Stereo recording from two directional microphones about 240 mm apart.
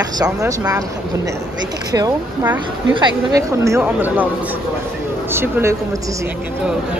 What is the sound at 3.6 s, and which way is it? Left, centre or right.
Speech, centre.